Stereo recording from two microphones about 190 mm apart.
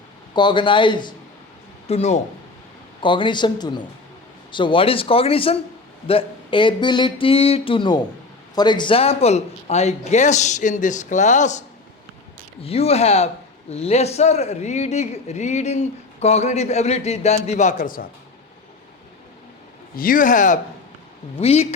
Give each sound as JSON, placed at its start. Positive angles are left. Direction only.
{"t": 0.3, "sound": "a sound", "side_deg": 25}
{"t": 1.9, "sound": "a man's voice", "side_deg": 35}
{"t": 3.0, "sound": "a sound", "side_deg": 25}
{"t": 8.5, "sound": "a man's voice", "side_deg": 25}
{"t": 12.6, "sound": "a man's voice", "side_deg": 30}
{"t": 20.0, "sound": "a man's voice", "side_deg": 45}